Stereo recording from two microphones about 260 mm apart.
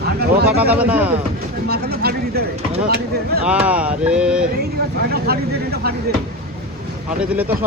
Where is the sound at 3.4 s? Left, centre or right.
Centre.